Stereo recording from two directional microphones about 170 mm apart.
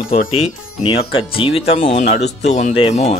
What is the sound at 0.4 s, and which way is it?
Speech, 30° left (ahead or behind).